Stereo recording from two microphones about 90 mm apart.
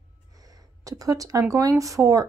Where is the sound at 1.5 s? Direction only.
40° right (ahead or behind).